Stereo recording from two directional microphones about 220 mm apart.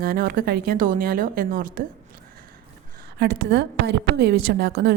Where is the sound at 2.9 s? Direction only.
45° right (ahead or behind).